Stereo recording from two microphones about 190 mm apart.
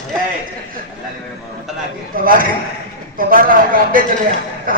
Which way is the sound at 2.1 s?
45° right (ahead or behind).